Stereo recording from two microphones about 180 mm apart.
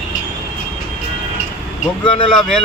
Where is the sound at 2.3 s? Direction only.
5° left (ahead or behind).